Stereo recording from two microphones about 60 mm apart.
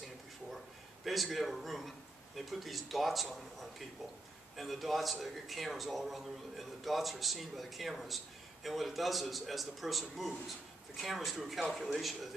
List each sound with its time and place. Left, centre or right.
1.0 s a man's voice: centre